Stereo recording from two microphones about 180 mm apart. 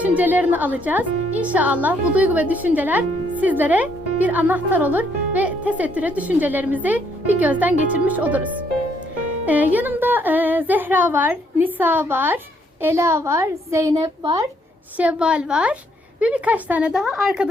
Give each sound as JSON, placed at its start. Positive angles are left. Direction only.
{"t": 0.0, "sound": "speech", "side_deg": -10}
{"t": 14.9, "sound": "a woman's voice", "side_deg": -5}